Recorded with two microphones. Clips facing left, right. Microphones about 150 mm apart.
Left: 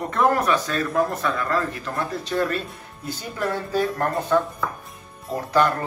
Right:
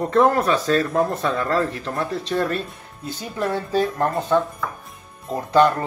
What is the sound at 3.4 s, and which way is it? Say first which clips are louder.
Speech: right 2 dB; 25° right (ahead or behind).